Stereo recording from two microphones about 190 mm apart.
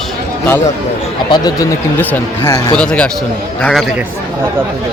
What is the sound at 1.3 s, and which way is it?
Speech, 20° left (ahead or behind).